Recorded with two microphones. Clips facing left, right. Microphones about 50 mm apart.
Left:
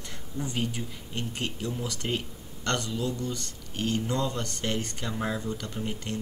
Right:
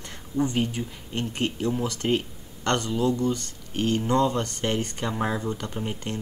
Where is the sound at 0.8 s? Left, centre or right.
Centre.